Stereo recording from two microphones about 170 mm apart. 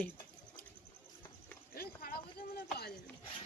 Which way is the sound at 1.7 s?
60° left (ahead or behind).